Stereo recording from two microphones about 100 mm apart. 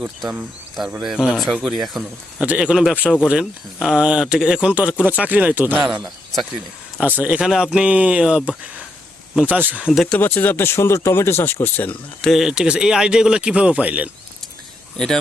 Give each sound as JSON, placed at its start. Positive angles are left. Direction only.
{"t": 1.0, "sound": "speech", "side_deg": -5}
{"t": 2.4, "sound": "speech", "side_deg": -10}
{"t": 6.0, "sound": "speech", "side_deg": 0}
{"t": 7.0, "sound": "speech", "side_deg": -15}
{"t": 9.6, "sound": "speech", "side_deg": -20}
{"t": 9.8, "sound": "speech", "side_deg": 0}
{"t": 10.1, "sound": "speech", "side_deg": 20}
{"t": 12.2, "sound": "speech", "side_deg": 0}
{"t": 14.9, "sound": "speech", "side_deg": 5}